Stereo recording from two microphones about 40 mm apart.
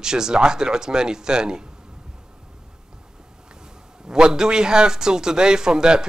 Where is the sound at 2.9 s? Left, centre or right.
Centre.